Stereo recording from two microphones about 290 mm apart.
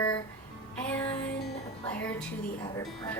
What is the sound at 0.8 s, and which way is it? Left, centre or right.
Music, centre.